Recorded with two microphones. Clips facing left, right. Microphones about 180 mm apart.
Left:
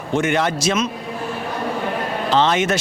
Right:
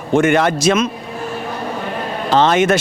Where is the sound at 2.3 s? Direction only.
45° right (ahead or behind).